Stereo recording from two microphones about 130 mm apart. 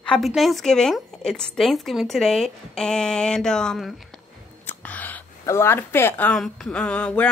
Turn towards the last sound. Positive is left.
turn(degrees=10)  # may be behind; listen again after turning